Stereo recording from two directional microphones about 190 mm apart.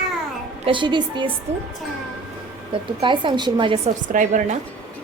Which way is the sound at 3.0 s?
25° right (ahead or behind).